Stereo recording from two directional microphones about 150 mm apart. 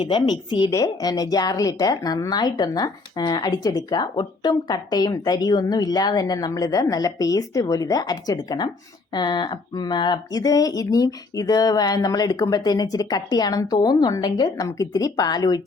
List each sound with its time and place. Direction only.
0.0 s a woman's voice: 30° left (ahead or behind)